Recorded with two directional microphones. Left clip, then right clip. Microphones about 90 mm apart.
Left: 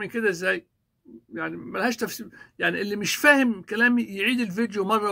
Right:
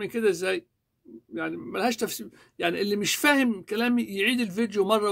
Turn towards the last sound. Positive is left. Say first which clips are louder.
# even
turn(degrees=-20)  # may be behind; listen again after turning